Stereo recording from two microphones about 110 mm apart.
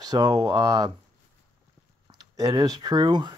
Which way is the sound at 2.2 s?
35° right (ahead or behind).